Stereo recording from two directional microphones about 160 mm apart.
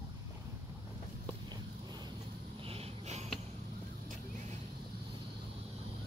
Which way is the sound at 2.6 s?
40° right (ahead or behind).